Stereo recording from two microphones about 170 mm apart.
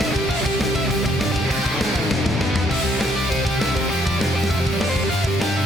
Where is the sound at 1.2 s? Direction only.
Centre (ahead or behind).